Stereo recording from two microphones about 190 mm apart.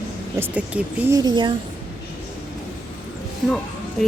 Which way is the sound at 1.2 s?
25° right (ahead or behind).